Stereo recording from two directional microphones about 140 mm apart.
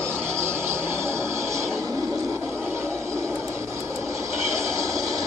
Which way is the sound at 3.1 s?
20° right (ahead or behind).